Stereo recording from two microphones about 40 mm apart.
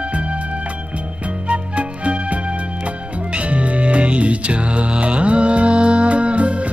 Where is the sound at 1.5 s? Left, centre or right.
Right.